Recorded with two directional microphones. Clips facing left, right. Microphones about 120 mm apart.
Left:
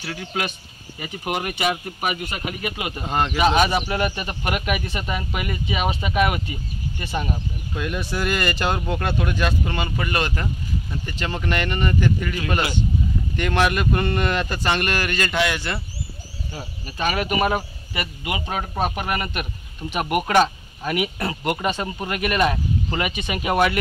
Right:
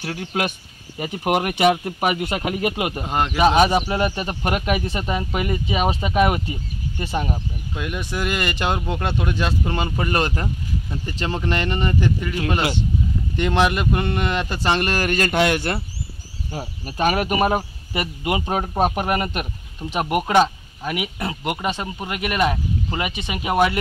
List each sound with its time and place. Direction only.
0.0 s speech: 50° right (ahead or behind)
1.2 s speech: 65° right (ahead or behind)
3.0 s speech: 10° right (ahead or behind)
3.7 s speech: 25° right (ahead or behind)
7.0 s speech: 20° right (ahead or behind); by 15.8 s 50° right (ahead or behind)
16.8 s speech: 45° right (ahead or behind); by 23.8 s 20° right (ahead or behind)